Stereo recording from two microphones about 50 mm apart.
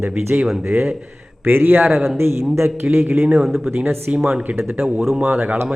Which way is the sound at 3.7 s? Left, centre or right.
Right.